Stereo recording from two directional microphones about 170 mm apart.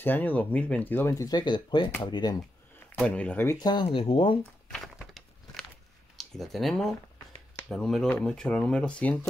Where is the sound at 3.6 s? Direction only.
30° left (ahead or behind).